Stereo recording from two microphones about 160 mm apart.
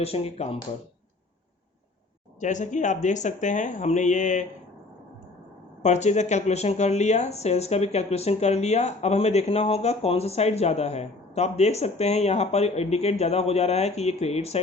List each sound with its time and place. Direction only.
0.0 s speech: 40° left (ahead or behind)
2.4 s speech: 50° left (ahead or behind)
5.8 s speech: 45° left (ahead or behind)